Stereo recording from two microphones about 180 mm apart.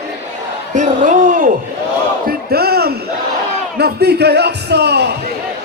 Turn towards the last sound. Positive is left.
turn(degrees=-65)  # may be behind; listen again after turning